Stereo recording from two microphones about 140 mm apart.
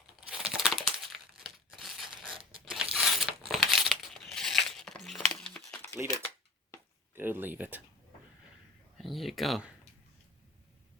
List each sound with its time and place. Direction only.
0.3 s crumpling: 5° right (ahead or behind)
2.0 s a sound: 35° right (ahead or behind)
2.6 s a sound: centre (ahead or behind)
5.3 s crumpling: 5° left (ahead or behind)
6.0 s speech: 15° right (ahead or behind)
7.2 s speech: 15° right (ahead or behind)
9.0 s speech: centre (ahead or behind)